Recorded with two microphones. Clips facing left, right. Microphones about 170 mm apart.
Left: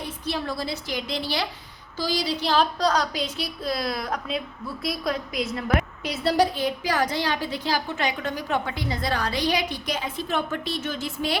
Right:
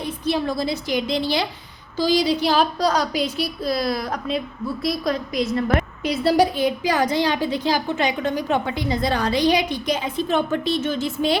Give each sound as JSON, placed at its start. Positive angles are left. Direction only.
{"t": 0.0, "sound": "a woman's voice", "side_deg": -20}
{"t": 6.3, "sound": "a woman's voice", "side_deg": -10}